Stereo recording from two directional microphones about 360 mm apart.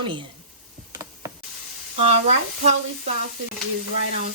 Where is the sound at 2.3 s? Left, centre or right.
Centre.